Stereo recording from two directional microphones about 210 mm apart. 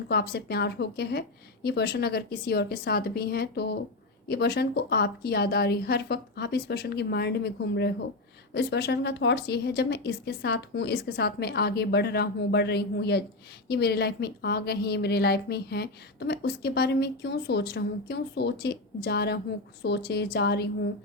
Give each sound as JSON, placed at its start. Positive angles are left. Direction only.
{"t": 0.1, "sound": "a woman's voice", "side_deg": 50}